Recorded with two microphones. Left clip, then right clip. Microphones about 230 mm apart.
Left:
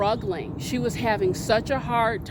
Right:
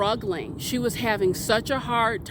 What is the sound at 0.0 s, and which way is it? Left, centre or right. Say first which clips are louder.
Speech: even; right.